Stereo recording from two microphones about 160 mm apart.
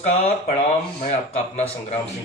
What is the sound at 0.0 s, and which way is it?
Speech, 45° left (ahead or behind).